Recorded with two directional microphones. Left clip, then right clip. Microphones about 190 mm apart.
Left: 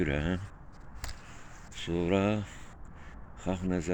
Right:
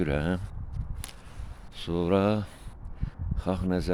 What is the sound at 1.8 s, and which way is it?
Speech, 35° right (ahead or behind).